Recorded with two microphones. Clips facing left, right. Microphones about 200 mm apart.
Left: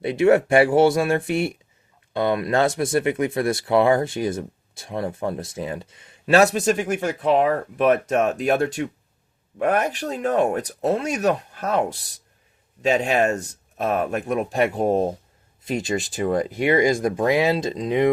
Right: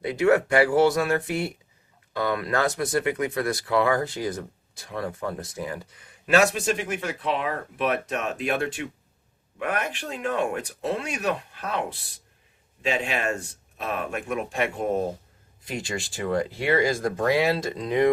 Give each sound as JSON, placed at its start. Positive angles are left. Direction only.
{"t": 0.0, "sound": "speech", "side_deg": 25}
{"t": 15.6, "sound": "speech", "side_deg": 25}